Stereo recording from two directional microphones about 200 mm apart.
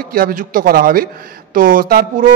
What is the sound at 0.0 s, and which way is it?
Speech, 45° right (ahead or behind).